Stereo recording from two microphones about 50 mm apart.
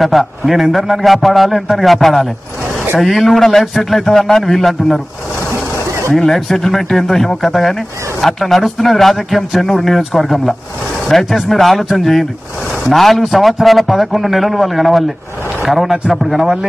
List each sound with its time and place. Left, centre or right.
0.0 s a man's voice: centre
5.5 s vehicle: right
6.1 s a man's voice: centre